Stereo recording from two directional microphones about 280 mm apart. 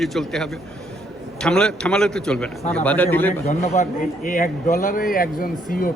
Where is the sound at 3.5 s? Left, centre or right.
Left.